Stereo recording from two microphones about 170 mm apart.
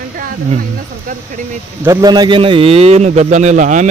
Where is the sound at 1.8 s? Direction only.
20° right (ahead or behind).